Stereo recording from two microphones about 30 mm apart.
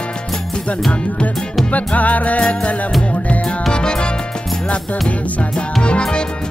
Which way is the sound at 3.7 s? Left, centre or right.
Left.